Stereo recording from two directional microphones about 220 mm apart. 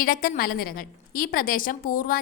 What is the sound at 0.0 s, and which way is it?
A woman's voice, 40° left (ahead or behind).